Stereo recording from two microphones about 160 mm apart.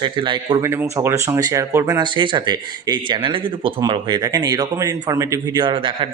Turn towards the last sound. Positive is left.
turn(degrees=-30)  # may be behind; listen again after turning